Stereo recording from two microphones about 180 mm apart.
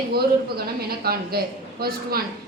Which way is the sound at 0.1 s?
60° right (ahead or behind).